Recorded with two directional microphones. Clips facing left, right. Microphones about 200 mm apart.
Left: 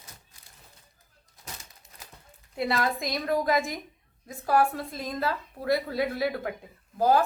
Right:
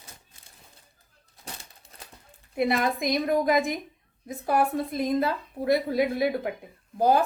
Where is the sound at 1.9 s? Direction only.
30° right (ahead or behind).